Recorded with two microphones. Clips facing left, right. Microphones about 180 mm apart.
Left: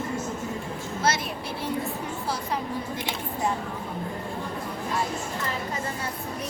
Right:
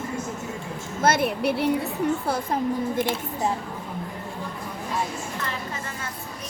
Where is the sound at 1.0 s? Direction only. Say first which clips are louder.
Right 7 dB; 55° right (ahead or behind).